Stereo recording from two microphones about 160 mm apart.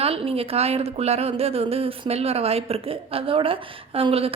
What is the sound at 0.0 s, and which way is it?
A woman's voice, 35° right (ahead or behind).